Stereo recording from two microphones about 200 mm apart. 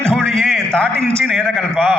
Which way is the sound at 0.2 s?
Centre (ahead or behind).